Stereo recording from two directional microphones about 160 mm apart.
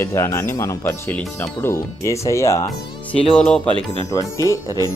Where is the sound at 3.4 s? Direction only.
5° left (ahead or behind).